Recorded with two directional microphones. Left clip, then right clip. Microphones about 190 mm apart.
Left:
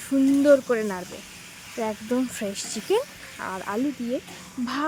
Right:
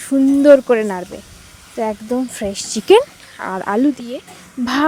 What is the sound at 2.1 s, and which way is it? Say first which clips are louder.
Speech: right 6 dB; 20° right (ahead or behind).